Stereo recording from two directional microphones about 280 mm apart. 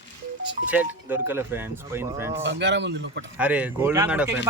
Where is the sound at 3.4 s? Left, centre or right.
Centre.